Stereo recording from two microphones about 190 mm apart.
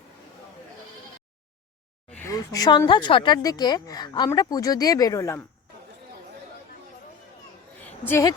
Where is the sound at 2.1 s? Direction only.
15° left (ahead or behind).